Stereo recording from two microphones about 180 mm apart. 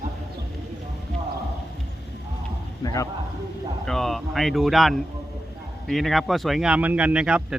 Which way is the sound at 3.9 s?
Centre (ahead or behind).